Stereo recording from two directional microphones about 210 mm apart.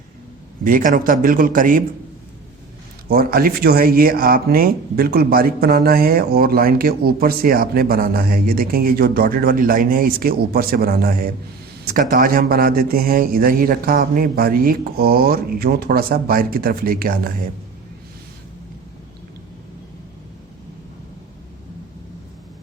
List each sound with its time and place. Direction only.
0.6 s a man's voice: 40° right (ahead or behind)
3.1 s speech: 45° right (ahead or behind)